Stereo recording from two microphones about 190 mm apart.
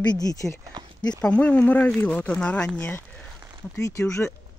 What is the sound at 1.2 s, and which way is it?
Speech, 5° left (ahead or behind).